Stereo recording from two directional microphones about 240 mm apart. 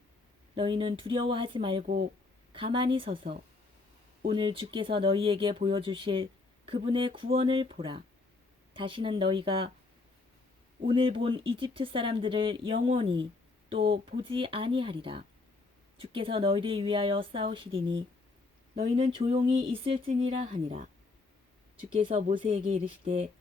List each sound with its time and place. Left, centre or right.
0.5 s speech: right
10.8 s a woman's voice: right